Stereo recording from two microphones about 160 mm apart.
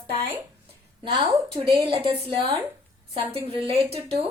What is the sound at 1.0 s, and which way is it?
A woman's voice, 35° right (ahead or behind).